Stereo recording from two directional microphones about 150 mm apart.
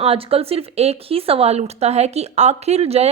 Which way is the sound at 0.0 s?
40° right (ahead or behind).